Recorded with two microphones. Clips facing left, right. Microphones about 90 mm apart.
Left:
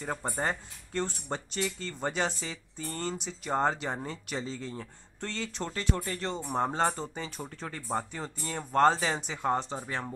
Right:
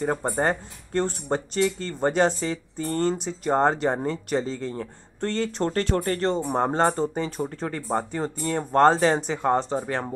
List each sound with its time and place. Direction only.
0.0 s speech: 50° right (ahead or behind)